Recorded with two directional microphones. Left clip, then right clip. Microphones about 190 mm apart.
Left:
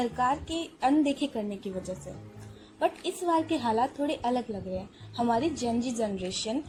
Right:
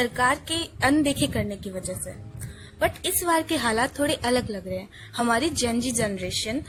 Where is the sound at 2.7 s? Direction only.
20° right (ahead or behind).